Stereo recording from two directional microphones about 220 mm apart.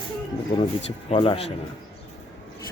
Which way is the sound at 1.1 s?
25° left (ahead or behind).